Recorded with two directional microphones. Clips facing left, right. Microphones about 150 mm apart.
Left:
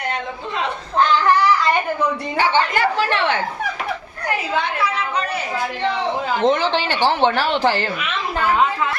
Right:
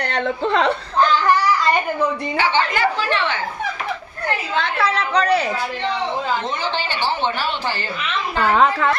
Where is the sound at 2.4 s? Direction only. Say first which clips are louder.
Left 2 dB; 50° left (ahead or behind).